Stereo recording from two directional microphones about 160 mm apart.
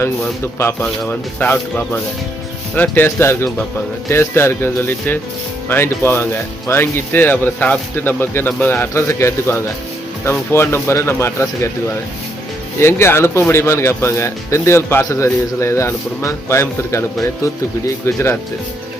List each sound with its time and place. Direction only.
0.6 s speech: 15° left (ahead or behind)
12.8 s speech: 15° left (ahead or behind)